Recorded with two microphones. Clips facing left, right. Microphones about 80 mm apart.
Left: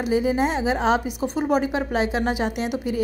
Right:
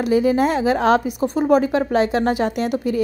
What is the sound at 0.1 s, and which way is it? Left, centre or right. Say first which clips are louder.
A woman's voice: right 4 dB; right.